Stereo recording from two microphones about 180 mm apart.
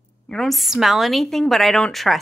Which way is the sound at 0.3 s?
Centre (ahead or behind).